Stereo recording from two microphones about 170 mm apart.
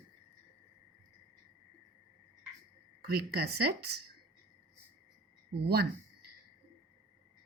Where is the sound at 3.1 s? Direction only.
65° right (ahead or behind).